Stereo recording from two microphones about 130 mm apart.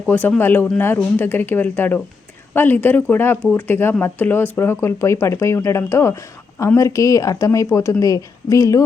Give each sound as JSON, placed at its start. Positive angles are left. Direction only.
{"t": 0.1, "sound": "speech", "side_deg": 15}